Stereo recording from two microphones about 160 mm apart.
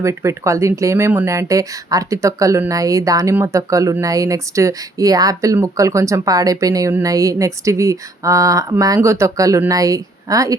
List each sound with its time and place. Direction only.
0.0 s speech: 20° right (ahead or behind)